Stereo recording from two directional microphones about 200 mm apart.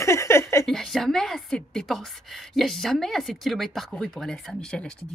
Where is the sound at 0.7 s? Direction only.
Centre (ahead or behind).